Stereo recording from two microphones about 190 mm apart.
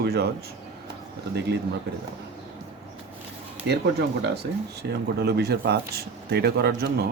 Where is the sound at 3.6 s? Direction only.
60° right (ahead or behind).